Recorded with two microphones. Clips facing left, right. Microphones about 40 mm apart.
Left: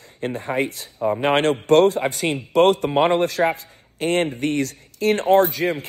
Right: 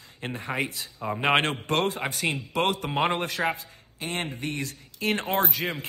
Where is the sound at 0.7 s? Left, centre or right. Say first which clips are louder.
Left 9 dB; left.